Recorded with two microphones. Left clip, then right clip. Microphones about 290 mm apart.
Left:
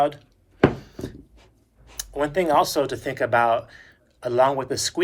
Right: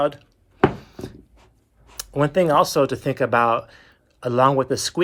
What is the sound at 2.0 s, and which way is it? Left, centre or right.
Speech, centre.